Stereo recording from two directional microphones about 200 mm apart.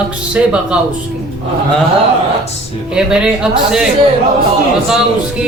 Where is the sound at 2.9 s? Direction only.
5° right (ahead or behind).